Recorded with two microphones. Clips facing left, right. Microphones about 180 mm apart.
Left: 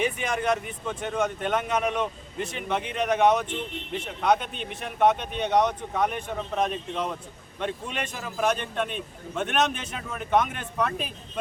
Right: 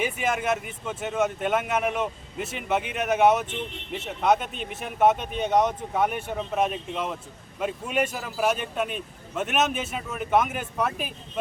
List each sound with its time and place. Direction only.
0.0 s a man's voice: 5° right (ahead or behind)